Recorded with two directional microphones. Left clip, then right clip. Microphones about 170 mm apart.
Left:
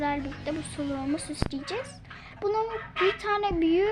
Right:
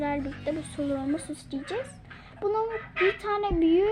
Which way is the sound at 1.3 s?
90° left.